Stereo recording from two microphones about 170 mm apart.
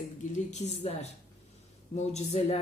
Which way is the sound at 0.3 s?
40° left (ahead or behind).